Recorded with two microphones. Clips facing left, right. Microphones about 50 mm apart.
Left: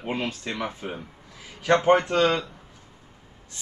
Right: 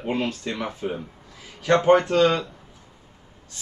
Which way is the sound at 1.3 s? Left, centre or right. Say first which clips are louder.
Even; centre.